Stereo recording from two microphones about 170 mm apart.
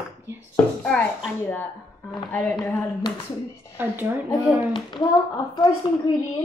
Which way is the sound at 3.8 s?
10° right (ahead or behind).